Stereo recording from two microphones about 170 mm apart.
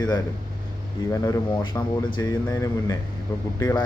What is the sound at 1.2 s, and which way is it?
Speech, 20° left (ahead or behind).